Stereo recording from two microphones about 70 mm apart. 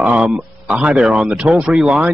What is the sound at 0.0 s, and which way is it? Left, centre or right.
Speech, centre.